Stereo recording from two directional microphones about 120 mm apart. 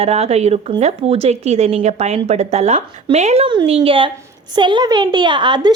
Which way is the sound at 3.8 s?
45° right (ahead or behind).